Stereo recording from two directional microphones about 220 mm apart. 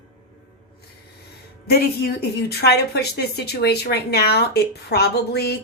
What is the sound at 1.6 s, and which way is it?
A woman's voice, 45° left (ahead or behind).